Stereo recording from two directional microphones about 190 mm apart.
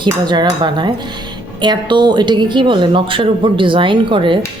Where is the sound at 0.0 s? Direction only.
20° right (ahead or behind).